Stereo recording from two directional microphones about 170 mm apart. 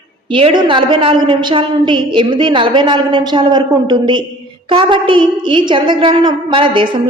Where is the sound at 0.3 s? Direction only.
30° right (ahead or behind).